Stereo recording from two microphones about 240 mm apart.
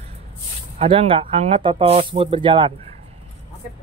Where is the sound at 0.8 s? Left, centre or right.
Right.